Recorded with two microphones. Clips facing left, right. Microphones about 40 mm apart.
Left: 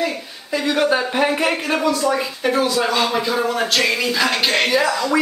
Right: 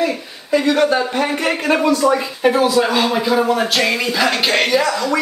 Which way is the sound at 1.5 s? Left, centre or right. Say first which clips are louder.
Right 3 dB; centre.